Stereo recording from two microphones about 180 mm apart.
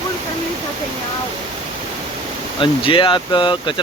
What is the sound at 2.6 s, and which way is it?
Speech, 30° left (ahead or behind).